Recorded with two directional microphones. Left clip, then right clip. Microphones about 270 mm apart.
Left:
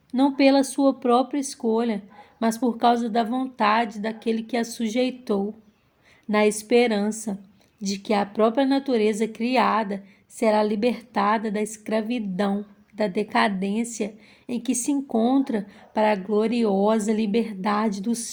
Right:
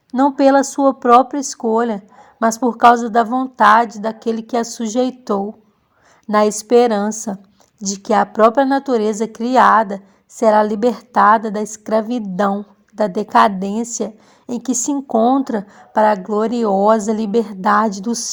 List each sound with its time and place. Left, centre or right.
0.1 s a woman's voice: right